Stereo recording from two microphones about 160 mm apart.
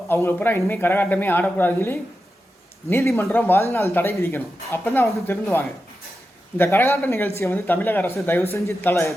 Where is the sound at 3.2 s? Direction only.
10° left (ahead or behind).